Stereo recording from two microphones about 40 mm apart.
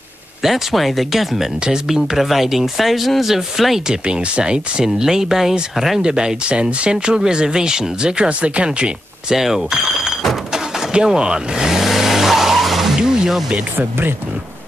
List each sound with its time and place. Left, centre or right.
0.4 s speech: centre
3.8 s speech: centre
4.8 s speech: centre
9.3 s speech: centre
10.5 s vehicle: centre
12.9 s music: centre
13.7 s speech: right